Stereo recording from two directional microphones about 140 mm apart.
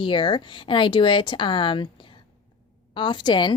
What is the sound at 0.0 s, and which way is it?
A woman's voice, 35° left (ahead or behind).